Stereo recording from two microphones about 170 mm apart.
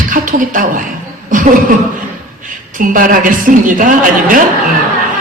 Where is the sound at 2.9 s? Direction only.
55° right (ahead or behind).